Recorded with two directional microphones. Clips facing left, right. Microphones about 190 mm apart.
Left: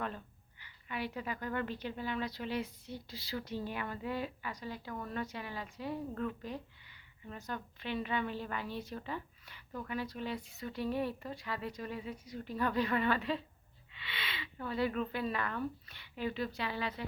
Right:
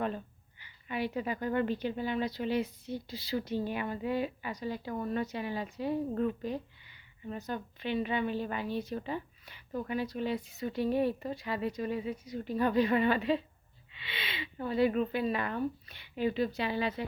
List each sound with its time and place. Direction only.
0.6 s a woman's voice: 20° right (ahead or behind)